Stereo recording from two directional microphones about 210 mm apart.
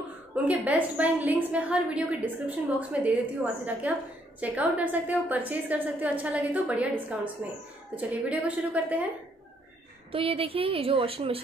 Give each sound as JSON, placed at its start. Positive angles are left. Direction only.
{"t": 0.5, "sound": "a woman's voice", "side_deg": -5}
{"t": 10.1, "sound": "a woman's voice", "side_deg": -25}